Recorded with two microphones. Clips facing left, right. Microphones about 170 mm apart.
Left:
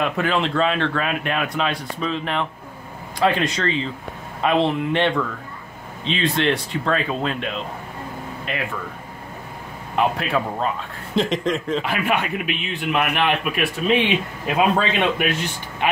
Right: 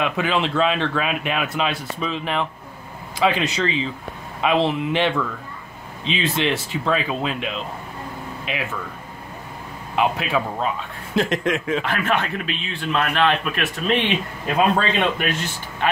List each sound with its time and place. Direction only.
0.0 s speech: centre (ahead or behind)
9.9 s speech: centre (ahead or behind)
11.8 s a man's voice: 10° left (ahead or behind)